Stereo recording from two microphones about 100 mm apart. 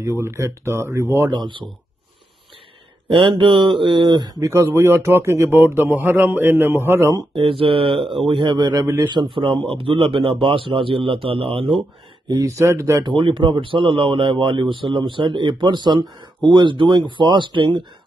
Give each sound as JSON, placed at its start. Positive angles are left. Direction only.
{"t": 0.0, "sound": "a man's voice", "side_deg": -25}
{"t": 1.3, "sound": "speech", "side_deg": -50}
{"t": 3.1, "sound": "speech", "side_deg": -55}
{"t": 4.5, "sound": "a man's voice", "side_deg": -30}
{"t": 7.3, "sound": "speech", "side_deg": -65}
{"t": 12.3, "sound": "speech", "side_deg": -35}
{"t": 13.0, "sound": "speech", "side_deg": -55}